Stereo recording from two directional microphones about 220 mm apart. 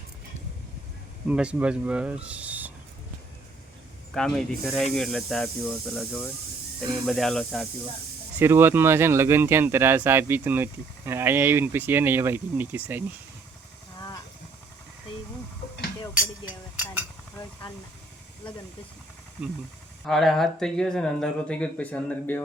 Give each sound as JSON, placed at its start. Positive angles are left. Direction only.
{"t": 1.3, "sound": "speech", "side_deg": -5}
{"t": 4.1, "sound": "speech", "side_deg": 0}
{"t": 8.4, "sound": "speech", "side_deg": -10}
{"t": 15.6, "sound": "a sound", "side_deg": 45}
{"t": 16.7, "sound": "a sound", "side_deg": -10}
{"t": 20.1, "sound": "speech", "side_deg": 0}